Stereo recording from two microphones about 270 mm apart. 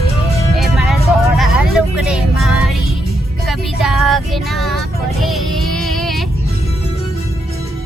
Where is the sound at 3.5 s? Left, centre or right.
Centre.